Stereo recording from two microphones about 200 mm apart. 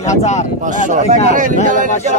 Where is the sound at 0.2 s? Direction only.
35° left (ahead or behind).